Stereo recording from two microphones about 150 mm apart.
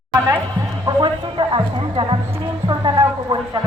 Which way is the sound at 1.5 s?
35° right (ahead or behind).